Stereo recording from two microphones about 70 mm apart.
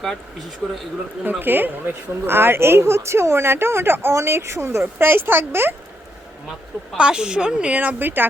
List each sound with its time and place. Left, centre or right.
0.0 s speech: centre
1.2 s speech: right
6.9 s a woman's voice: centre; by 8.3 s right